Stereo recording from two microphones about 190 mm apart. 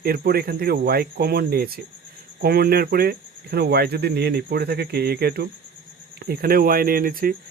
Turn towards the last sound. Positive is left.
turn(degrees=-50)  # may be behind; listen again after turning